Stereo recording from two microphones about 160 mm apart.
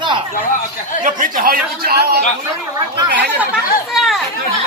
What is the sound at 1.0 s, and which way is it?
Speech, 55° right (ahead or behind).